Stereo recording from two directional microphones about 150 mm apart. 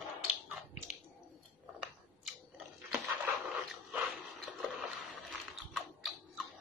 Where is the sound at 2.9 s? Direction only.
Centre (ahead or behind).